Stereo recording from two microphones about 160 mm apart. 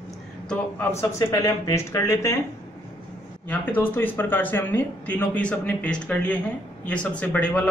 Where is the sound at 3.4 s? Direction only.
10° left (ahead or behind).